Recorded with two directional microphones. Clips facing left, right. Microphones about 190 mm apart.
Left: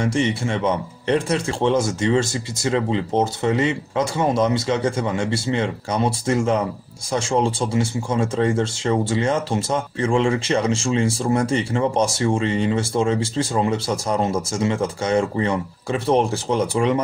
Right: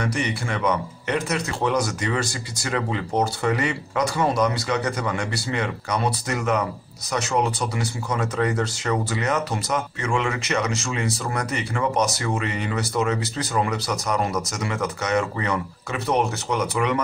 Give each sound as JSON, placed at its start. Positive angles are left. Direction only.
{"t": 0.0, "sound": "speech", "side_deg": 25}